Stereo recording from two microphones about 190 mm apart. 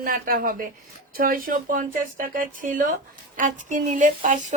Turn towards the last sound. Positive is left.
turn(degrees=-40)  # may be behind; listen again after turning